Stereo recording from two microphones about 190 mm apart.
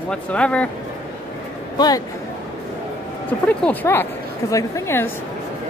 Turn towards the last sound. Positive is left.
turn(degrees=15)  # may be behind; listen again after turning